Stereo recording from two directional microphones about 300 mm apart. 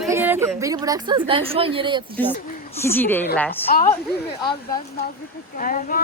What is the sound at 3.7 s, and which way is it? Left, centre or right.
Speech, left.